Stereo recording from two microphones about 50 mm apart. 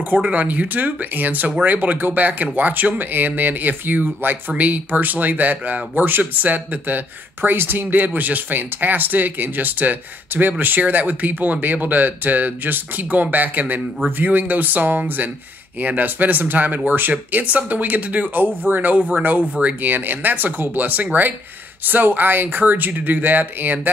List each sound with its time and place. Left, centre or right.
0.2 s speech: right
7.4 s speech: right
18.9 s speech: right
19.8 s speech: right